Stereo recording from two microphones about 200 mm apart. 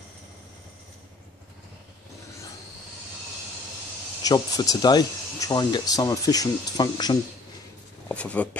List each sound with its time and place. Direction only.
4.2 s speech: 20° left (ahead or behind)
8.1 s speech: 5° left (ahead or behind)